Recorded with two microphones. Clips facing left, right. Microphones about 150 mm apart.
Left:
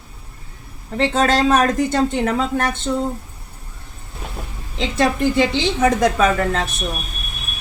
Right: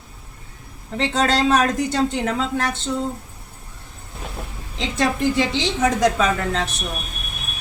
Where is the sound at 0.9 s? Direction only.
50° left (ahead or behind).